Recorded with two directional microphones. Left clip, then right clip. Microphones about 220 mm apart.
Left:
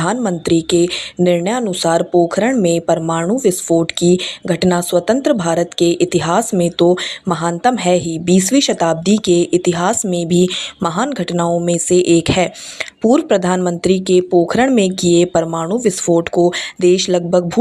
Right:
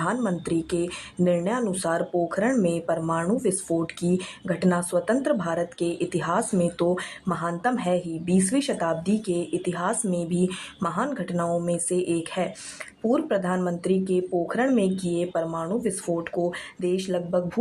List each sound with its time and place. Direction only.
0.0 s speech: 25° left (ahead or behind)